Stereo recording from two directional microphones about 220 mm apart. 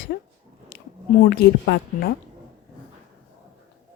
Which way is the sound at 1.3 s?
50° left (ahead or behind).